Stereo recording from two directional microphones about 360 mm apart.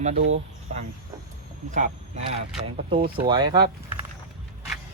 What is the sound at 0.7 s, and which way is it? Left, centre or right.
Speech, centre.